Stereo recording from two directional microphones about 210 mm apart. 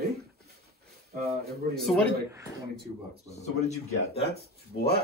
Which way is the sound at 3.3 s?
30° left (ahead or behind).